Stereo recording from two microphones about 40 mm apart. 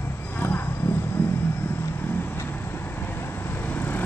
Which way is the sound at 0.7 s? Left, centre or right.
Left.